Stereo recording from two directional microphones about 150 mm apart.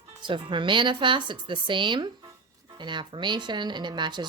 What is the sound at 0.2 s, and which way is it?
Speech, 35° right (ahead or behind).